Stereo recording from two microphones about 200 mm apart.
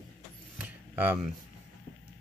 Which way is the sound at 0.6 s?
10° right (ahead or behind).